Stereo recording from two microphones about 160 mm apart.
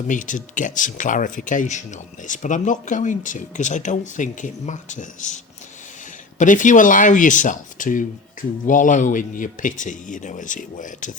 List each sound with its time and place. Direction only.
0.1 s speech: 55° left (ahead or behind)
6.4 s speech: 50° left (ahead or behind)